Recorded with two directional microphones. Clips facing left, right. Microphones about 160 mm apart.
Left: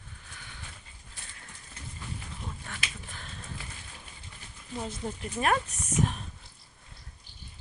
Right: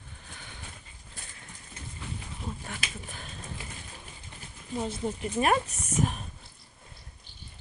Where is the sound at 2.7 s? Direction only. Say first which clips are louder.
Right 2 dB; 15° right (ahead or behind).